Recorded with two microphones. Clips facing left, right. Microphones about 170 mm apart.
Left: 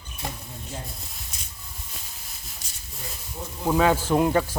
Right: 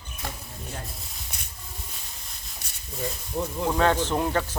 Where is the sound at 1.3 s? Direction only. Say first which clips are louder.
Right 1 dB; 65° right (ahead or behind).